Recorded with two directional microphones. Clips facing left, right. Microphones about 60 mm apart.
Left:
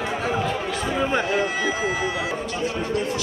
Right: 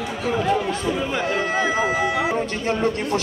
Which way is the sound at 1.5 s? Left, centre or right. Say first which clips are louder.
Right 3 dB; right.